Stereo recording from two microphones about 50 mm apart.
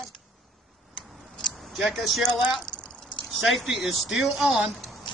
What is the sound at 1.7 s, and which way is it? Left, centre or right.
Speech, centre.